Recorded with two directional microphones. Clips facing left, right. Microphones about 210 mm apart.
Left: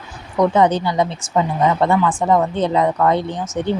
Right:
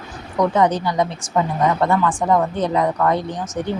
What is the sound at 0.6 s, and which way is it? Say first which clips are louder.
Speech: left 1 dB; 25° left (ahead or behind).